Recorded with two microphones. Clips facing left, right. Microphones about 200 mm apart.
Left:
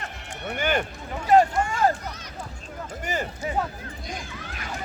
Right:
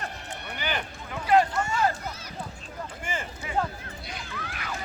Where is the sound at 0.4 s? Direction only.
50° left (ahead or behind).